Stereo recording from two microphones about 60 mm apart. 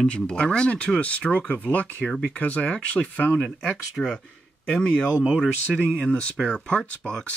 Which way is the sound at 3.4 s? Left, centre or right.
Centre.